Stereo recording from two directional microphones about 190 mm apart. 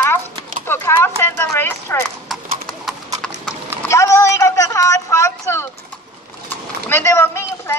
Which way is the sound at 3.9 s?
15° left (ahead or behind).